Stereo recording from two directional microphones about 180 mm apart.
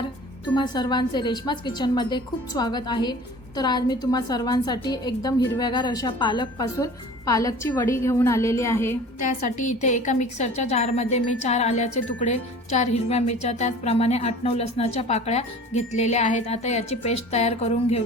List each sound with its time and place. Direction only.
0.5 s a woman's voice: 25° left (ahead or behind)
9.8 s a woman's voice: 40° left (ahead or behind)